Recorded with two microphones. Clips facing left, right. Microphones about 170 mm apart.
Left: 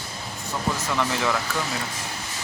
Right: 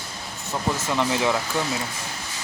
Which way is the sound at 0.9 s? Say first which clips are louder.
Right 3 dB; 15° right (ahead or behind).